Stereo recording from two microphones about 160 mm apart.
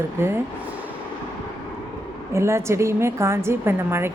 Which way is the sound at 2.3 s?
15° right (ahead or behind).